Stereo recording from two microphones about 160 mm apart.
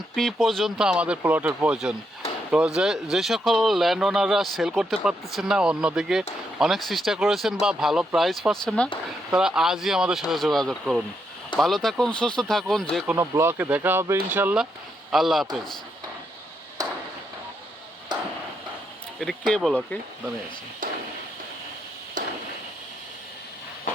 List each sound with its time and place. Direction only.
0.2 s speech: centre (ahead or behind)
13.1 s speech: 20° right (ahead or behind); by 15.4 s centre (ahead or behind)
18.1 s a sound: 25° right (ahead or behind)
19.2 s speech: centre (ahead or behind)